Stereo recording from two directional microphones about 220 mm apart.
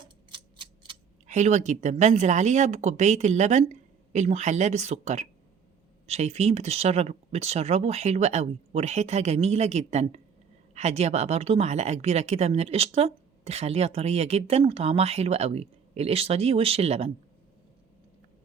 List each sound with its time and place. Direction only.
0.0 s speech: 20° right (ahead or behind)